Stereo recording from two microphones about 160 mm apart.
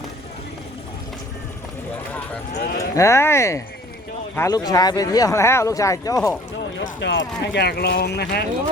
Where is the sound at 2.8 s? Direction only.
20° left (ahead or behind).